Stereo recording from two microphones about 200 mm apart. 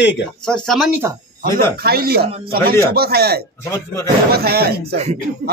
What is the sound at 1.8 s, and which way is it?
Speech, 50° right (ahead or behind).